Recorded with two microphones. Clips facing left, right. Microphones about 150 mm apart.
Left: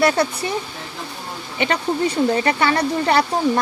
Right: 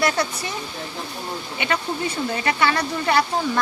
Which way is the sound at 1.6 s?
35° left (ahead or behind).